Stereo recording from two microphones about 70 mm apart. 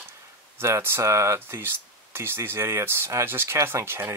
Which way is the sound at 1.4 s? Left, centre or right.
Right.